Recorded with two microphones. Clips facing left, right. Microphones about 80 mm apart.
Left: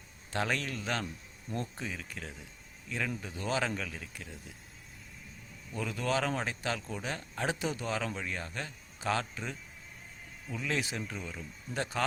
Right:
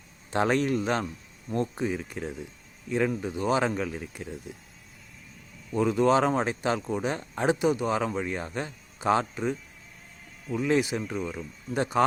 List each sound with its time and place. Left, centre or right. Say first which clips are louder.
0.3 s speech: right 9 dB; right
5.7 s speech: right 10 dB; right